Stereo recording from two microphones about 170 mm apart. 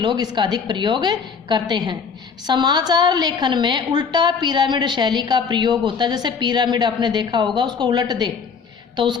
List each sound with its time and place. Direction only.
0.0 s a woman's voice: 25° right (ahead or behind)